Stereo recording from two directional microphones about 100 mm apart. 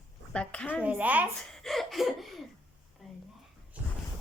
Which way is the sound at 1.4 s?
5° left (ahead or behind).